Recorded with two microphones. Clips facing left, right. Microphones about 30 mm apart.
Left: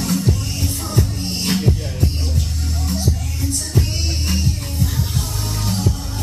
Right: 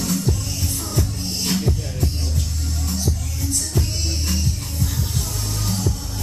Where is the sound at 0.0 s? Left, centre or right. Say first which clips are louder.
Left 3 dB; centre.